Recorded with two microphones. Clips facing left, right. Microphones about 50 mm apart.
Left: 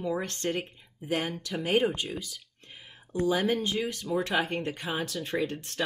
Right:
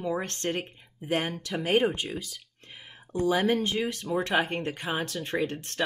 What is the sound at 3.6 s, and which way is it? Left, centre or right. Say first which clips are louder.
Speech: right 1 dB; right.